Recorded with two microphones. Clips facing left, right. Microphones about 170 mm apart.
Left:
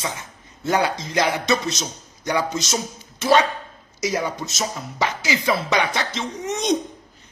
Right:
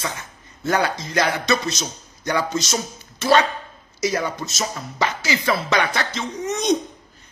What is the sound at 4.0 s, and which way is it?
Speech, 15° left (ahead or behind).